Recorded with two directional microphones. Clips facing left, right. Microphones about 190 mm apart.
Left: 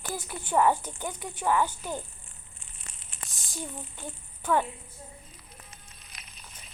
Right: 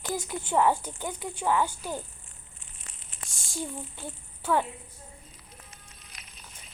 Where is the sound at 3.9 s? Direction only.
10° right (ahead or behind).